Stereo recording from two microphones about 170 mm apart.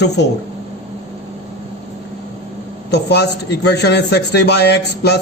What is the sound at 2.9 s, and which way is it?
Speech, 80° left.